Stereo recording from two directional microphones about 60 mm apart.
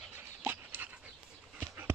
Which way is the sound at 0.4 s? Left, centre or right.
Right.